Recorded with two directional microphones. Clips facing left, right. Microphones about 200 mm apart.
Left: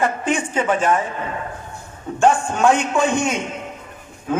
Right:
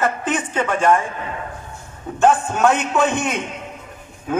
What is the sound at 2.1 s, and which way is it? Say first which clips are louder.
A man's voice: even; 5° right (ahead or behind).